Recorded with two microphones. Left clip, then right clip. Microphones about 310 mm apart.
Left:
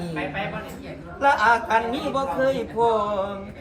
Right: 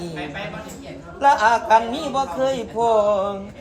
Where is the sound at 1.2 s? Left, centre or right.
Right.